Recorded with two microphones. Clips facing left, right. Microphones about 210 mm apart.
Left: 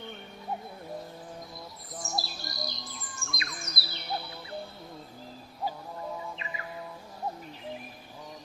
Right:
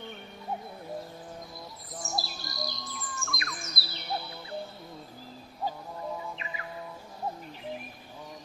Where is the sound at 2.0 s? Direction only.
Centre (ahead or behind).